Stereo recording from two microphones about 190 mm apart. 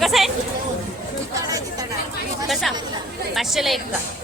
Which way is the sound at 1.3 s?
20° right (ahead or behind).